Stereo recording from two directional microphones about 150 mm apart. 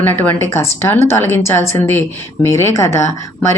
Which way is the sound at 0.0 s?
10° left (ahead or behind).